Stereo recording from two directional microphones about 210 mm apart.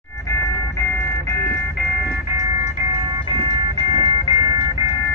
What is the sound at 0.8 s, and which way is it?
Music, 15° left (ahead or behind).